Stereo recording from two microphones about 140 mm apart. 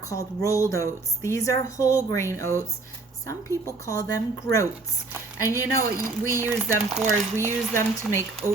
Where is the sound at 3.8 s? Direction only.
20° left (ahead or behind).